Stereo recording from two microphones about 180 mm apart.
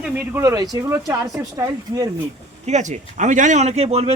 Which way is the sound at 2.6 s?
40° right (ahead or behind).